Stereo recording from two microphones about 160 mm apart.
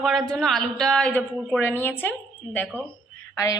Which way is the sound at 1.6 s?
15° left (ahead or behind).